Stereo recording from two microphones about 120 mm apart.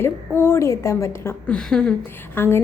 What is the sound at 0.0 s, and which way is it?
A woman's voice, 20° left (ahead or behind).